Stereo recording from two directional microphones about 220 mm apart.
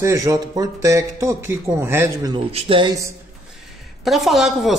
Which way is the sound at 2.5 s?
25° right (ahead or behind).